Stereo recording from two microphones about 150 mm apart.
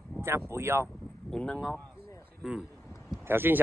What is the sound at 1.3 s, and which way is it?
Speech, 5° left (ahead or behind).